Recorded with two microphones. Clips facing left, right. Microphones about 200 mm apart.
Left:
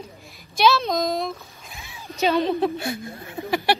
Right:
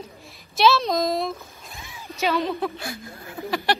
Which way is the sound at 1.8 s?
25° left (ahead or behind).